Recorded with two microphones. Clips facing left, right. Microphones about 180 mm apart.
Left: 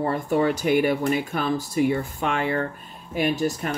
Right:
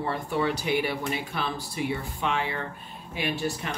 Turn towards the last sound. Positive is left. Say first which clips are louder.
# left 6 dB
turn(degrees=45)  # may be behind; listen again after turning